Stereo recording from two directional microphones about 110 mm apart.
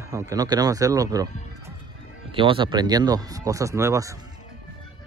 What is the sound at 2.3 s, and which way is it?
Speech, 50° right (ahead or behind).